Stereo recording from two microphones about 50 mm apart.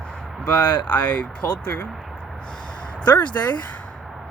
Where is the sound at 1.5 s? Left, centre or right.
Left.